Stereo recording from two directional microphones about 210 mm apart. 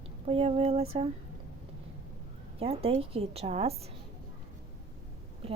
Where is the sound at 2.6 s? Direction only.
30° right (ahead or behind).